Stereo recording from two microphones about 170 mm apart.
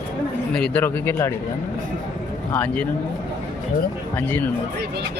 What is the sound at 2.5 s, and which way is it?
Speech, 10° left (ahead or behind).